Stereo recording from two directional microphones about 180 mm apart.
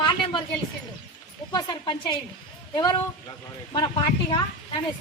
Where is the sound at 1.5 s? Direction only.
25° left (ahead or behind).